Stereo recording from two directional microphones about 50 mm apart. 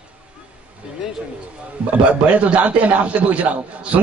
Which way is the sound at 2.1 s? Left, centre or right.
Right.